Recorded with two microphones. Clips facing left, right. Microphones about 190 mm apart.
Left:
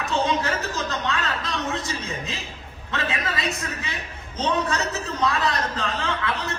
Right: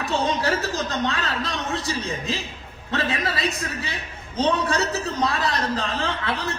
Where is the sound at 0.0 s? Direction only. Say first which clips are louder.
Even; 35° right (ahead or behind).